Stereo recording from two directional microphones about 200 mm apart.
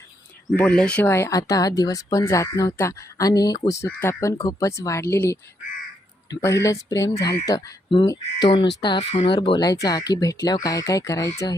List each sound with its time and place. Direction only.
0.5 s speech: 5° left (ahead or behind)
6.4 s speech: 15° left (ahead or behind)